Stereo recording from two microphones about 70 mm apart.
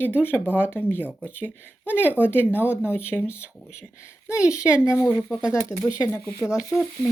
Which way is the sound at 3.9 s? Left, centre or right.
Left.